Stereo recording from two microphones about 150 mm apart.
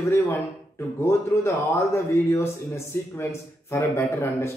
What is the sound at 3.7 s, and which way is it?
Speech, 20° left (ahead or behind).